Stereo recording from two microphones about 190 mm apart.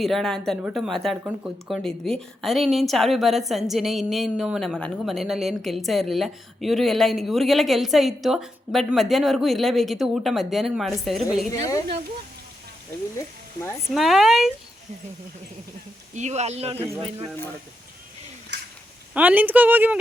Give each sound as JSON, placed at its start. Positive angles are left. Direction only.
{"t": 0.0, "sound": "a woman's voice", "side_deg": 0}
{"t": 11.5, "sound": "speech", "side_deg": 15}
{"t": 13.1, "sound": "speech", "side_deg": 15}
{"t": 13.9, "sound": "a woman's voice", "side_deg": 0}
{"t": 16.1, "sound": "speech", "side_deg": -35}
{"t": 19.1, "sound": "a woman's voice", "side_deg": -10}